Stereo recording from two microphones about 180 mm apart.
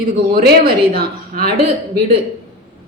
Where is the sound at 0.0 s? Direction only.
55° right (ahead or behind).